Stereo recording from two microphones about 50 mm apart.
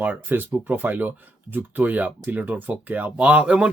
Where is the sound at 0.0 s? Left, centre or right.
Right.